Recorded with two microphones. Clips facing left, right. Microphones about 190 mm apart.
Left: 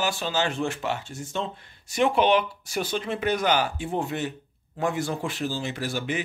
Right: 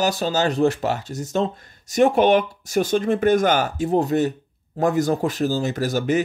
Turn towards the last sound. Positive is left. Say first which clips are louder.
# right 8 dB
turn(degrees=-40)  # may be behind; listen again after turning